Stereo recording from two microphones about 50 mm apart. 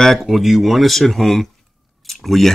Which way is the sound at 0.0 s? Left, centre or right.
Centre.